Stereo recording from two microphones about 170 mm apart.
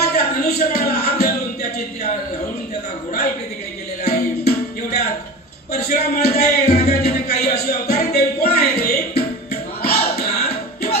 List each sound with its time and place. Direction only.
0.1 s music: 70° left (ahead or behind)
4.0 s music: 70° left (ahead or behind)
5.8 s music: 70° left (ahead or behind)
7.3 s a sound: 70° left (ahead or behind)
8.1 s music: 70° left (ahead or behind)
10.2 s music: 40° left (ahead or behind)